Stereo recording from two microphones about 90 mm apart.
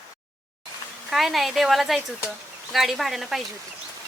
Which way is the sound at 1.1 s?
Centre (ahead or behind).